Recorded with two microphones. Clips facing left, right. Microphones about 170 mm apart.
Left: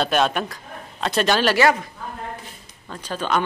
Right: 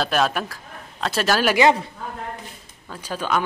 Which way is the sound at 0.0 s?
Centre (ahead or behind).